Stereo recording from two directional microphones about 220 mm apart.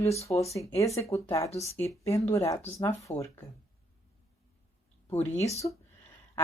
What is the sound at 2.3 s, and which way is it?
A woman's voice, 15° left (ahead or behind).